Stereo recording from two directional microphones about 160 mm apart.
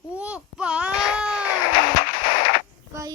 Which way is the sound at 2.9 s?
20° right (ahead or behind).